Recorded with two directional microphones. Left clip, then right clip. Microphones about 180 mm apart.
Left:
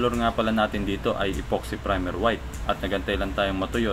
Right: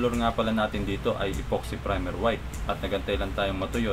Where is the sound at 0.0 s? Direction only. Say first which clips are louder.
Left 2 dB; 20° left (ahead or behind).